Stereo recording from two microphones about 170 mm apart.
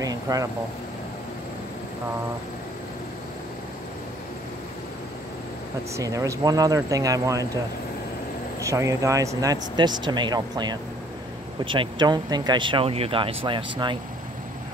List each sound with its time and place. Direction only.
0.0 s air conditioning: 20° right (ahead or behind)
5.9 s speech: 20° right (ahead or behind)
8.5 s speech: 20° right (ahead or behind)